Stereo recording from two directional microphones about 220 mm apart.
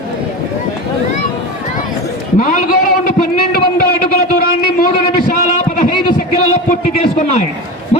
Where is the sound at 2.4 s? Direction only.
35° left (ahead or behind).